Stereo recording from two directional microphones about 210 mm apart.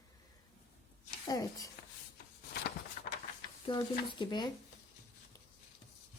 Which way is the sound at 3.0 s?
40° left (ahead or behind).